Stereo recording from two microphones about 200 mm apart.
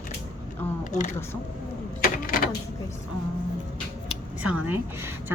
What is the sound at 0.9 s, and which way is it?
Speech, 35° left (ahead or behind).